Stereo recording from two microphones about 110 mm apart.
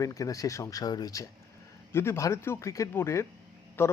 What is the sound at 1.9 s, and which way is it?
A man's voice, 25° left (ahead or behind).